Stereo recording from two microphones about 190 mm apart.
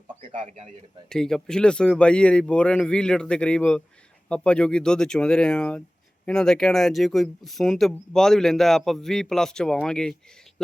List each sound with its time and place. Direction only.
0.2 s a man's voice: 35° right (ahead or behind)
1.1 s speech: 5° left (ahead or behind)